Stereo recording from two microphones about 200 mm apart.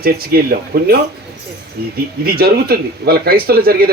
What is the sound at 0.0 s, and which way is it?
Speech, 50° right (ahead or behind).